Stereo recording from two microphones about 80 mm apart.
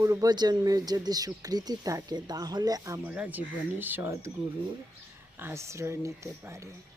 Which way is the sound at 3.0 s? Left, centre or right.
Centre.